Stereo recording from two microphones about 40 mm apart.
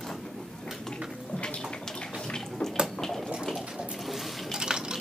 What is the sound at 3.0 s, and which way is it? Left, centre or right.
Water, centre.